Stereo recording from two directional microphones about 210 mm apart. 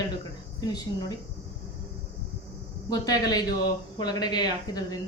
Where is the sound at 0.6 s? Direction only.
20° left (ahead or behind).